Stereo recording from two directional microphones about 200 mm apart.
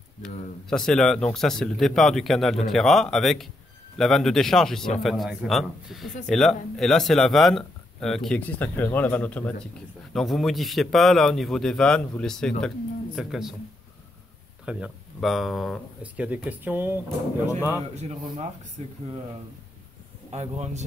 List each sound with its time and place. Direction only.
0.7 s a man's voice: 5° left (ahead or behind)
14.6 s a man's voice: 5° right (ahead or behind)
18.8 s speech: 30° right (ahead or behind)
20.2 s speech: 35° right (ahead or behind)